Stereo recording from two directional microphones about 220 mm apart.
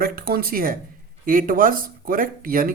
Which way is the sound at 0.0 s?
45° right (ahead or behind).